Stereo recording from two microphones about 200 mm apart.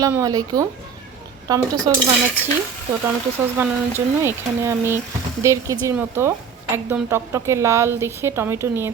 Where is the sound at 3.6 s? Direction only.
10° right (ahead or behind).